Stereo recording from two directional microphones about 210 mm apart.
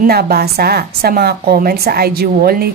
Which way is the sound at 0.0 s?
45° right (ahead or behind).